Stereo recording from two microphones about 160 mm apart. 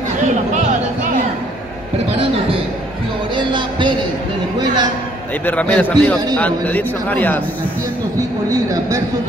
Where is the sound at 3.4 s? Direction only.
30° right (ahead or behind).